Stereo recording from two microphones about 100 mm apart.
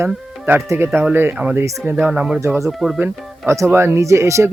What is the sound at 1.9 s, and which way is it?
Speech, 10° right (ahead or behind).